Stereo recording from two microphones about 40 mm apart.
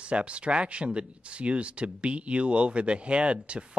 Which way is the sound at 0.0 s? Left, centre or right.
Right.